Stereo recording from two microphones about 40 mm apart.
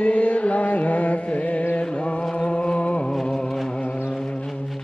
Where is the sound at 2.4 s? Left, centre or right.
Left.